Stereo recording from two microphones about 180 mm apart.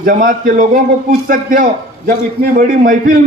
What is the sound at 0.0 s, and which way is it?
A man's voice, 50° right (ahead or behind).